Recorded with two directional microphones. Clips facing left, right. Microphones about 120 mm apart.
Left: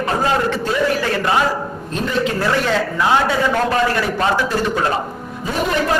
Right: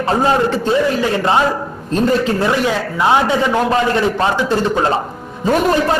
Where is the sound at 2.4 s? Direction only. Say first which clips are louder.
Right 2 dB; 20° right (ahead or behind).